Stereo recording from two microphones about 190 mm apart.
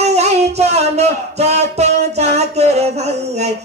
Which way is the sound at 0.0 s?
35° right (ahead or behind).